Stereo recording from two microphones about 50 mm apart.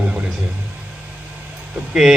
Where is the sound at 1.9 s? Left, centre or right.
Centre.